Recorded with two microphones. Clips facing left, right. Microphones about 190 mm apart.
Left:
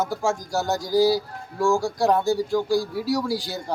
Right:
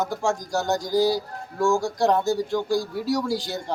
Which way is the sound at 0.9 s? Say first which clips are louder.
Left 3 dB; 5° left (ahead or behind).